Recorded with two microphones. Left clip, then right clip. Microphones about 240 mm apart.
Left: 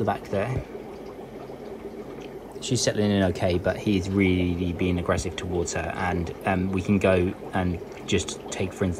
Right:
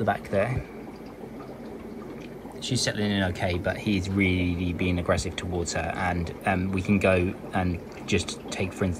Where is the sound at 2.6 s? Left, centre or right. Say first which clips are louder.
Left 2 dB; centre.